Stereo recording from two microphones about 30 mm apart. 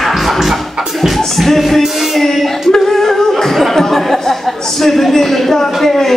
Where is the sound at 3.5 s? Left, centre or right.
Centre.